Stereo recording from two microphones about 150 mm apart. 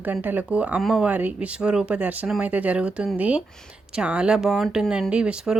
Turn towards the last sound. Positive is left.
turn(degrees=-5)  # may be behind; listen again after turning